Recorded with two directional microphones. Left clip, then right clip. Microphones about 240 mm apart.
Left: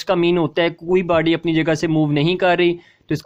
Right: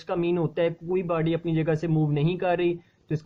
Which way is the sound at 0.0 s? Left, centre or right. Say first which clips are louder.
Left 9 dB; left.